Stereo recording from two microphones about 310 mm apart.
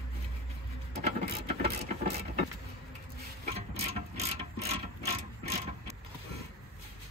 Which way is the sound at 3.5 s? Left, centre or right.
Centre.